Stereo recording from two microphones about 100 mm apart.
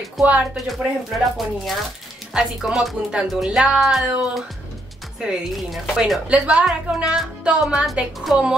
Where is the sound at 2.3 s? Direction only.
5° right (ahead or behind).